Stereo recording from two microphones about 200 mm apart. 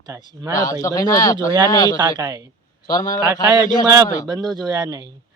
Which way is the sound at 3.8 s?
20° right (ahead or behind).